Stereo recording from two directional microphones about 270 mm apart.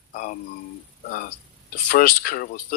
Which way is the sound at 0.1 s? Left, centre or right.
Left.